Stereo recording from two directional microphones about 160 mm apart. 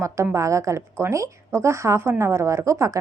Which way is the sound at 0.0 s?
20° right (ahead or behind).